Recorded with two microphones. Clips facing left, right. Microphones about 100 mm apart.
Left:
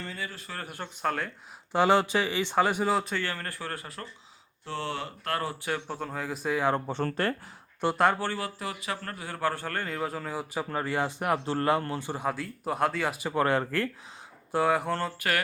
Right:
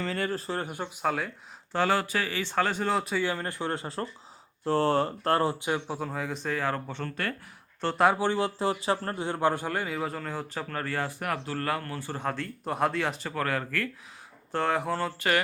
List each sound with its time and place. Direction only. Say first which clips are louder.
0.0 s speech: right 7 dB; 90° right
0.3 s speech: right 8 dB; 35° right (ahead or behind)
0.7 s a man's voice: left 3 dB; 10° right (ahead or behind)
1.7 s speech: left 3 dB; 20° left (ahead or behind)
2.9 s a man's voice: even; centre (ahead or behind)
3.2 s speech: right 5 dB; 20° right (ahead or behind)
4.6 s speech: right 9 dB; 40° right (ahead or behind); by 6.0 s 15° right (ahead or behind)
6.0 s speech: right 1 dB; centre (ahead or behind); by 7.3 s 35° left (ahead or behind)
7.9 s a man's voice: right 2 dB; 5° right (ahead or behind)
8.2 s a man's voice: right 6 dB; 20° right (ahead or behind); by 12.2 s 20° left (ahead or behind)
12.2 s a man's voice: left 1 dB; 5° left (ahead or behind)
13.4 s speech: left 4 dB; 25° left (ahead or behind)
14.5 s a man's voice: left 2 dB; 5° left (ahead or behind)